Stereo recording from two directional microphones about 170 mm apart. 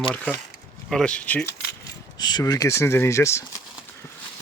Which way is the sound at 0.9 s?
5° left (ahead or behind).